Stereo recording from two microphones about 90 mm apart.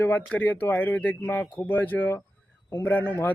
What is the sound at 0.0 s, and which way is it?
Speech, 20° left (ahead or behind).